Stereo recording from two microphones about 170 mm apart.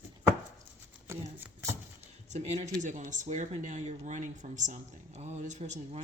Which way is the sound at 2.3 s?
40° right (ahead or behind).